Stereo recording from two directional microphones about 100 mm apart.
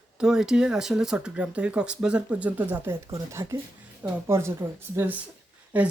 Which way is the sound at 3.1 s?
30° right (ahead or behind).